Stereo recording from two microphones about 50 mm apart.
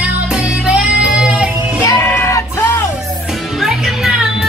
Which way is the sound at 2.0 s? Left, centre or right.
Left.